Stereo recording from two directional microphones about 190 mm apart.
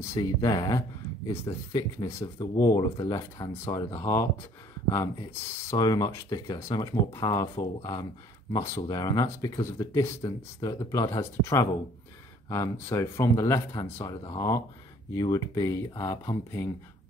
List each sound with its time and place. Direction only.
0.0 s speech: 15° left (ahead or behind)
5.7 s speech: 20° left (ahead or behind)